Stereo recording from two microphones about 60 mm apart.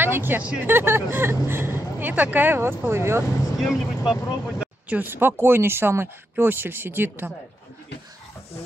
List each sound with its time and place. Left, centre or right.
0.0 s a sound: right
0.4 s speech: right
0.7 s speech: right
3.5 s speech: centre
4.6 s a sound: right
5.0 s speech: right